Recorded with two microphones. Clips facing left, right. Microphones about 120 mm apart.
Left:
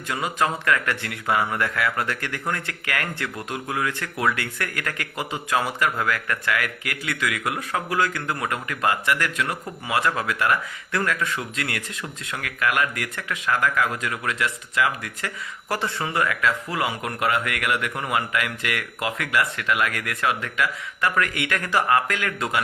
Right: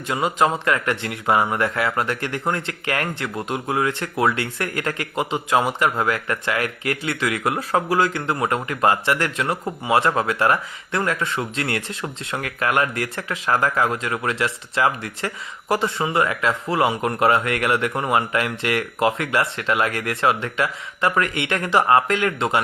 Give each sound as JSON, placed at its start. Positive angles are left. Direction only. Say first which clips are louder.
{"t": 0.1, "sound": "speech", "louder": "right 4 dB", "side_deg": -25}
{"t": 15.7, "sound": "speech", "louder": "right 5 dB", "side_deg": -20}